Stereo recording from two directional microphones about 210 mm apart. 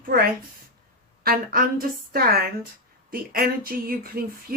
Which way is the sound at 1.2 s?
45° right (ahead or behind).